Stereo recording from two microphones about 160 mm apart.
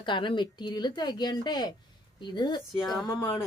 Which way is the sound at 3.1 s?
15° left (ahead or behind).